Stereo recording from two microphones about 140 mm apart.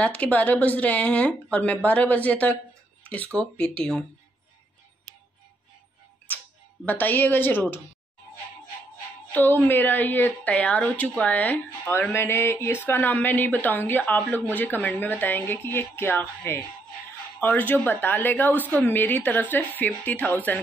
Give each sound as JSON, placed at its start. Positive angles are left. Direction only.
{"t": 0.0, "sound": "speech", "side_deg": 10}
{"t": 3.0, "sound": "a sound", "side_deg": 10}
{"t": 3.3, "sound": "speech", "side_deg": 5}
{"t": 6.3, "sound": "music", "side_deg": 10}
{"t": 6.9, "sound": "speech", "side_deg": 15}
{"t": 9.3, "sound": "speech", "side_deg": 15}